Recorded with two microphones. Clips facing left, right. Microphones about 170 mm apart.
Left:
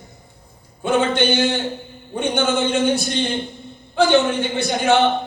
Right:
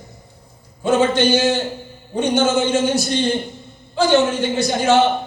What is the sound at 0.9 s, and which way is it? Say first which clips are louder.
Speech: right 2 dB; 55° left (ahead or behind).